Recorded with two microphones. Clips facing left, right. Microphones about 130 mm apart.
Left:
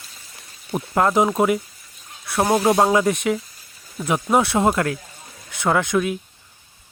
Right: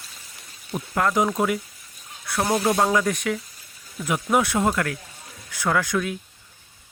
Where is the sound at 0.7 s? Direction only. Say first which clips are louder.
Left 4 dB; 30° left (ahead or behind).